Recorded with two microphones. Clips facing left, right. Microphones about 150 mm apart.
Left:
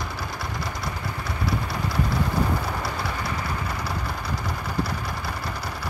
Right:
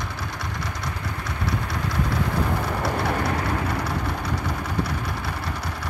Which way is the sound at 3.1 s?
60° right (ahead or behind).